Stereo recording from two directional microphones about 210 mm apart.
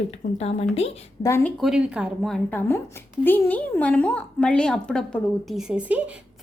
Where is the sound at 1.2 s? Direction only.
10° left (ahead or behind).